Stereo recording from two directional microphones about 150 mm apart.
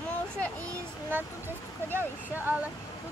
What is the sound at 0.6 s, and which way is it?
Speech, 15° right (ahead or behind).